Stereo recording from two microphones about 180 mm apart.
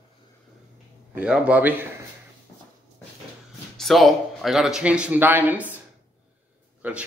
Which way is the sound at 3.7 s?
Centre (ahead or behind).